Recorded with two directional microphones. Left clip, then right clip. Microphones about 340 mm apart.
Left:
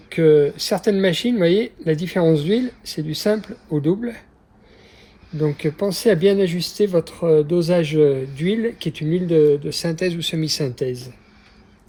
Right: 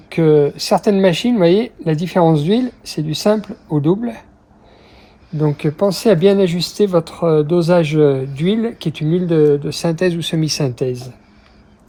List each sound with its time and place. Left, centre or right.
0.1 s speech: centre
5.4 s speech: centre